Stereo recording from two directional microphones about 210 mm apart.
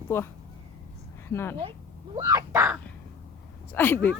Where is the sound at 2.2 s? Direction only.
15° right (ahead or behind).